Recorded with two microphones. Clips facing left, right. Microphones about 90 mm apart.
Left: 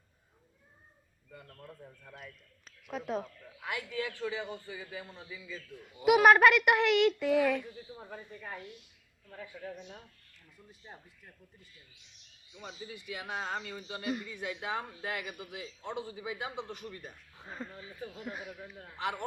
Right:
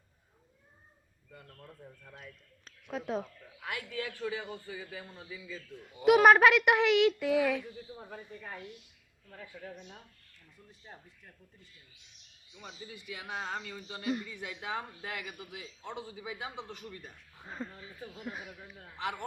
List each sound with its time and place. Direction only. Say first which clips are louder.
2.1 s speech: left 1 dB; centre (ahead or behind)
3.7 s speech: left 2 dB; 25° left (ahead or behind)
6.1 s speech: right 1 dB; centre (ahead or behind)
8.1 s speech: left 2 dB; 20° left (ahead or behind)
10.7 s speech: left 1 dB; 10° left (ahead or behind)
13.1 s speech: left 1 dB; 25° left (ahead or behind)
17.5 s speech: right 1 dB; centre (ahead or behind)